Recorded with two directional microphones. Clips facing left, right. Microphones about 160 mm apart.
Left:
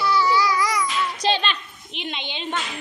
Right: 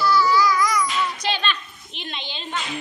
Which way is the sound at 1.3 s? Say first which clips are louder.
Left 6 dB; 30° left (ahead or behind).